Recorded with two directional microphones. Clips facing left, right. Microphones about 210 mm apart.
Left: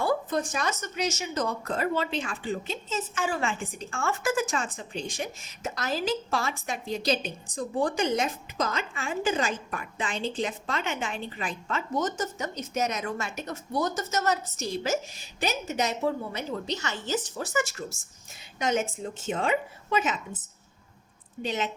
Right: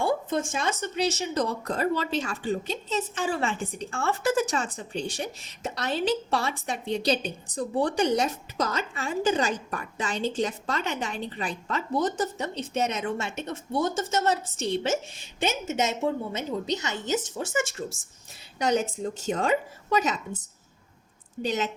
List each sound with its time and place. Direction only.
0.0 s a woman's voice: 25° right (ahead or behind); by 20.1 s 40° right (ahead or behind)
21.4 s a woman's voice: 40° right (ahead or behind)